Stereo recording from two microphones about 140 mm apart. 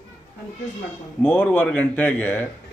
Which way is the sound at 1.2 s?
15° left (ahead or behind).